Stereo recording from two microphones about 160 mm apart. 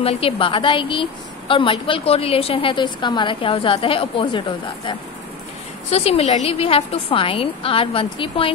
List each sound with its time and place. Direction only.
0.0 s a woman's voice: 35° left (ahead or behind)